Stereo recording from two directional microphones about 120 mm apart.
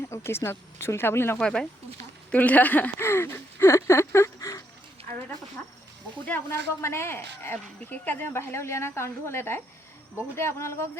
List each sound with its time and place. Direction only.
0.1 s speech: 20° left (ahead or behind)
1.4 s speech: 5° left (ahead or behind); by 4.6 s 25° left (ahead or behind)
6.2 s speech: 15° left (ahead or behind)